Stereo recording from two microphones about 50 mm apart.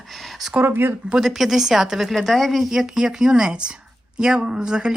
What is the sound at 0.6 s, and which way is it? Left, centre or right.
Speech, right.